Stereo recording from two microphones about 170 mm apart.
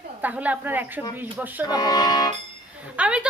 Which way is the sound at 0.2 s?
10° right (ahead or behind).